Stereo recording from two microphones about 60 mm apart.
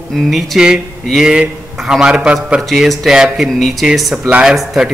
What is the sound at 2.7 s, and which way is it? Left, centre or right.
A man's voice, centre.